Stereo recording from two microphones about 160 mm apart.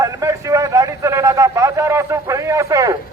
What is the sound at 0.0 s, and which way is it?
A man's voice, 20° right (ahead or behind).